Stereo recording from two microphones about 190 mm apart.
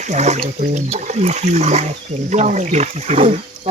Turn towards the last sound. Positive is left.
turn(degrees=-35)  # may be behind; listen again after turning